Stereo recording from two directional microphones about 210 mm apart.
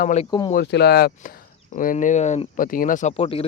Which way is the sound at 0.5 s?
50° left (ahead or behind).